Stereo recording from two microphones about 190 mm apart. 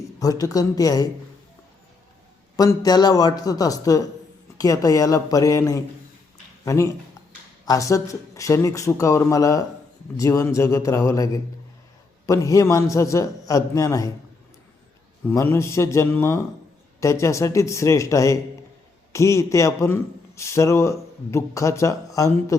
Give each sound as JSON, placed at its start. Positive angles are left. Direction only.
{"t": 0.2, "sound": "a man's voice", "side_deg": 20}
{"t": 2.6, "sound": "a man's voice", "side_deg": 20}
{"t": 15.3, "sound": "a man's voice", "side_deg": 15}